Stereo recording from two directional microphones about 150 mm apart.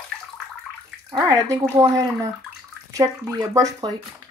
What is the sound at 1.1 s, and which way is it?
Speech, 20° right (ahead or behind).